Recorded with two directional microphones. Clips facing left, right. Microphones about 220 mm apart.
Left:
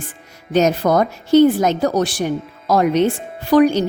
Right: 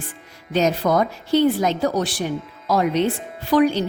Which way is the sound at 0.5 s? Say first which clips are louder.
Left 4 dB; 45° left (ahead or behind).